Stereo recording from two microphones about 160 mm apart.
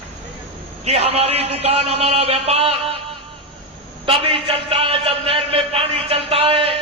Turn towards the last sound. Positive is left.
turn(degrees=-35)  # may be behind; listen again after turning